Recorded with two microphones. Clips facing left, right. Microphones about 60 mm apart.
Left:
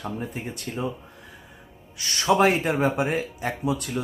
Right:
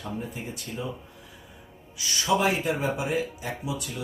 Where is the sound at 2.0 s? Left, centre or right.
Left.